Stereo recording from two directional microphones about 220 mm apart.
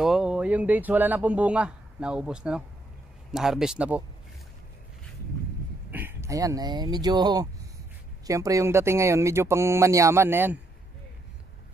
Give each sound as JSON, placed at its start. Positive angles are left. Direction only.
{"t": 0.0, "sound": "a man's voice", "side_deg": 0}
{"t": 5.9, "sound": "speech", "side_deg": -10}